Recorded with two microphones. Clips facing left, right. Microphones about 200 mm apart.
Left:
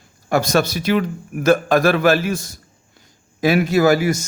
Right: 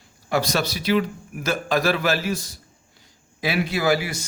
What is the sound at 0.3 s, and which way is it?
A man's voice, 50° left (ahead or behind).